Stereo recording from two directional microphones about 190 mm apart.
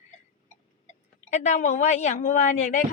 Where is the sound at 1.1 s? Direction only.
40° left (ahead or behind).